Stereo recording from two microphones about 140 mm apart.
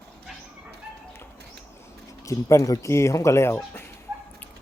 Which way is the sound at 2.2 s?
20° left (ahead or behind).